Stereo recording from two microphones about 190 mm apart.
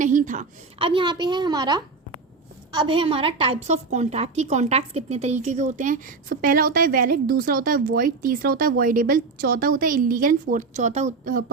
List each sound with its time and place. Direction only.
0.0 s a woman's voice: 40° right (ahead or behind)
0.8 s a woman's voice: 25° right (ahead or behind); by 11.5 s 45° right (ahead or behind)